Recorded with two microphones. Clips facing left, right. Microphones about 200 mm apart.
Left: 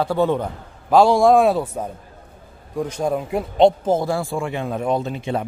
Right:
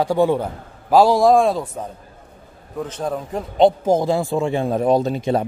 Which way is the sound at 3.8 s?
15° right (ahead or behind).